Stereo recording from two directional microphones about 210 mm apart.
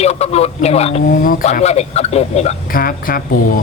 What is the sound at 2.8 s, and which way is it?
Speech, 45° left (ahead or behind).